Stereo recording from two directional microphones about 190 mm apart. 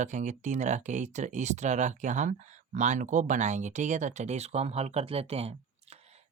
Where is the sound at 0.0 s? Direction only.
40° right (ahead or behind).